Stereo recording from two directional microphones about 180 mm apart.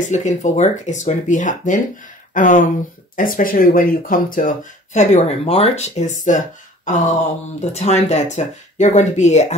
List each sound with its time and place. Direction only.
0.1 s speech: 40° left (ahead or behind)